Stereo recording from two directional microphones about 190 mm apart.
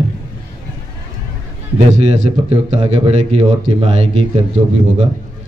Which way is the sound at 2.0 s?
35° right (ahead or behind).